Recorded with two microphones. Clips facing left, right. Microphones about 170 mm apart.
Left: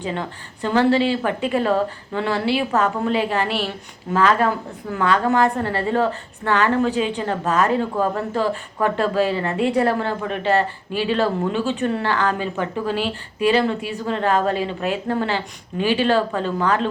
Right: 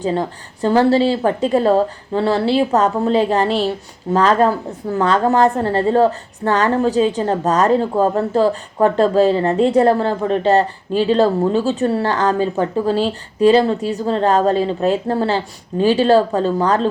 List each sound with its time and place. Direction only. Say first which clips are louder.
0.0 s speech: right 7 dB; 35° right (ahead or behind)